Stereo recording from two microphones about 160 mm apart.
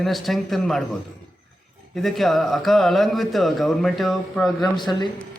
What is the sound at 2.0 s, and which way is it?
Speech, centre (ahead or behind).